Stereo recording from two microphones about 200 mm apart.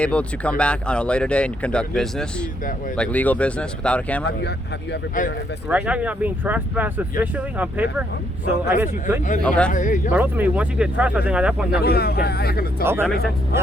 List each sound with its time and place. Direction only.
0.0 s speech: 5° left (ahead or behind)
4.4 s speech: 55° left (ahead or behind)
5.6 s speech: 5° right (ahead or behind)
9.4 s speech: 5° left (ahead or behind)
9.7 s speech: 40° left (ahead or behind)
10.1 s speech: 10° right (ahead or behind)
11.8 s speech: 50° left (ahead or behind)
12.8 s speech: 10° right (ahead or behind)